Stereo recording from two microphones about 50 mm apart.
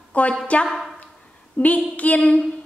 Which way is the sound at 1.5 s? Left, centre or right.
Left.